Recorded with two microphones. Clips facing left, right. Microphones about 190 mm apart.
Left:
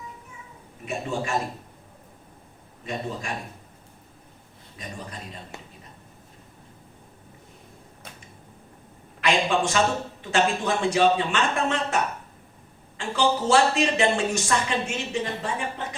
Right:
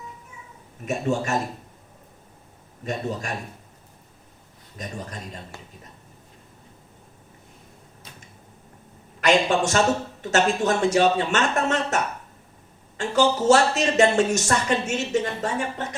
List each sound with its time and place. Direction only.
0.9 s speech: 45° right (ahead or behind)
2.8 s speech: 45° right (ahead or behind)
4.8 s speech: 45° right (ahead or behind)
9.2 s speech: 45° right (ahead or behind)
13.0 s speech: 45° right (ahead or behind)